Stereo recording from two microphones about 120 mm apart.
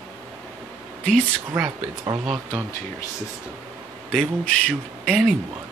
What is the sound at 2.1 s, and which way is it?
Speech, 40° right (ahead or behind).